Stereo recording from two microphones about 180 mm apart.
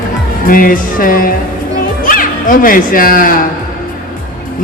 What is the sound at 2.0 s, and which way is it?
Speech, 50° left (ahead or behind).